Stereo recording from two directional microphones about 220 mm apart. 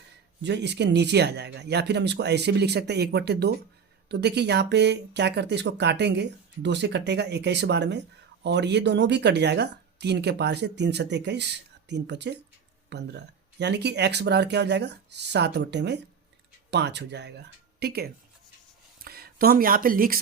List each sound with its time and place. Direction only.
0.4 s speech: 50° right (ahead or behind)